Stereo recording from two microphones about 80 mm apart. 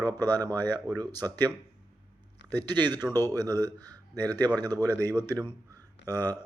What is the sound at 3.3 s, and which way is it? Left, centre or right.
Speech, right.